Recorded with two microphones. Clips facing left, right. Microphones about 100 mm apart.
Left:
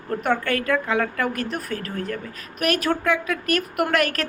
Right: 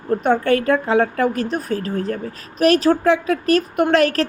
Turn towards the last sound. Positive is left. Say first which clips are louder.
# right 6 dB
turn(degrees=-30)  # may be behind; listen again after turning